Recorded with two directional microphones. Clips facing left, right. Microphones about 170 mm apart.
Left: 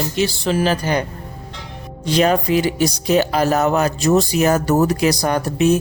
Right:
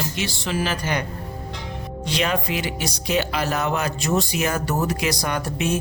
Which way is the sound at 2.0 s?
40° left (ahead or behind).